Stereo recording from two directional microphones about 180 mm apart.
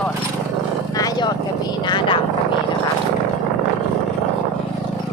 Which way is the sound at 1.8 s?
25° left (ahead or behind).